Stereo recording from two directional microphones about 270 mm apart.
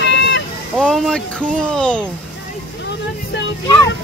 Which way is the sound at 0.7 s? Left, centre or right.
Centre.